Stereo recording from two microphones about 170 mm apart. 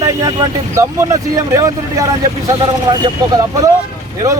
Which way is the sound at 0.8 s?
20° right (ahead or behind).